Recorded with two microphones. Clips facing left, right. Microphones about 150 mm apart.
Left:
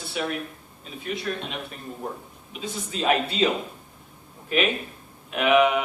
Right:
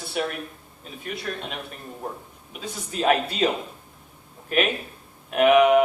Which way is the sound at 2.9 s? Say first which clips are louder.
Right 2 dB; 45° right (ahead or behind).